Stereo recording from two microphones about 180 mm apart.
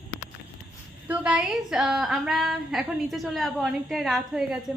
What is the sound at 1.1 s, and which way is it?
A woman's voice, 5° right (ahead or behind).